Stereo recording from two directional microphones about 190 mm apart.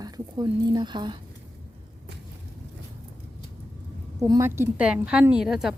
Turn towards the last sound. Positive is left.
turn(degrees=0)  # may be behind; listen again after turning